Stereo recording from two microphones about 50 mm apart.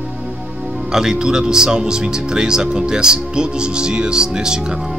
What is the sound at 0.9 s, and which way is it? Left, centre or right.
Speech, centre.